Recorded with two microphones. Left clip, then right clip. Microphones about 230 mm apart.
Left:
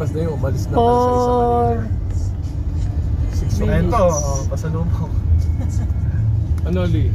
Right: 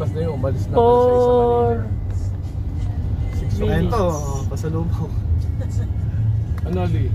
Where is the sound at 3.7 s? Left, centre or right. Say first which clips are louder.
Left 5 dB; right.